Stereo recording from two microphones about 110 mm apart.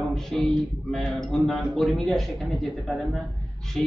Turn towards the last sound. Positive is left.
turn(degrees=5)  # may be behind; listen again after turning